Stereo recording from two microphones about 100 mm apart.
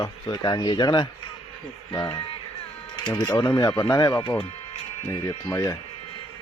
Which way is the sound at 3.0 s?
50° left (ahead or behind).